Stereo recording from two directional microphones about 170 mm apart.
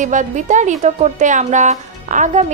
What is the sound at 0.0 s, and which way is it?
A woman's voice, 45° right (ahead or behind).